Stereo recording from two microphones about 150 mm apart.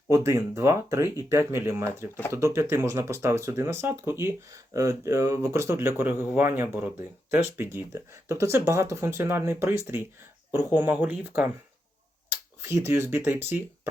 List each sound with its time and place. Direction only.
0.1 s speech: 20° right (ahead or behind)